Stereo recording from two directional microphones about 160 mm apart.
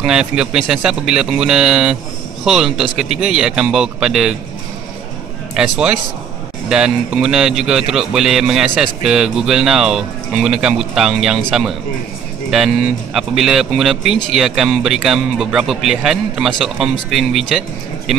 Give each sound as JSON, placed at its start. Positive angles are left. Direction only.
{"t": 0.0, "sound": "speech", "side_deg": -5}
{"t": 5.6, "sound": "speech", "side_deg": -5}